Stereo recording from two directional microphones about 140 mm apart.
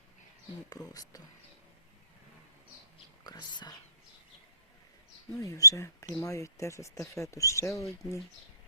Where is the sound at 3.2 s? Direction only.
30° left (ahead or behind).